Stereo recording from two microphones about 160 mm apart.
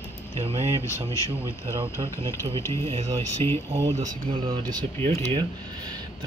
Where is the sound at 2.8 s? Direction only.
35° right (ahead or behind).